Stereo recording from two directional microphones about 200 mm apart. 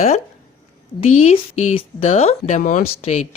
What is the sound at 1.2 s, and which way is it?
Speech, 30° left (ahead or behind).